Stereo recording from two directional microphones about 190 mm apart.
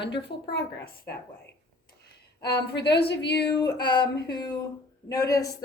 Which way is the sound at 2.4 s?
60° left (ahead or behind).